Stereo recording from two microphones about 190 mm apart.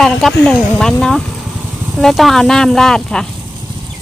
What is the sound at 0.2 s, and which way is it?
Speech, centre (ahead or behind).